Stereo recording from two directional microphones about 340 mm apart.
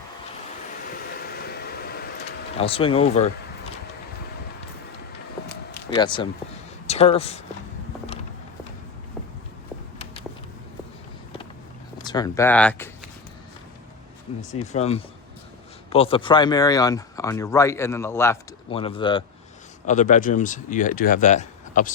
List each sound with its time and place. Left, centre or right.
0.9 s a sound: left
2.6 s speech: centre
5.5 s a sound: centre
6.8 s speech: centre
12.0 s speech: centre
14.3 s speech: centre